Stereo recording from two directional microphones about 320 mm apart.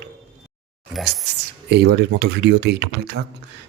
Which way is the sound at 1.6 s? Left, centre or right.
Right.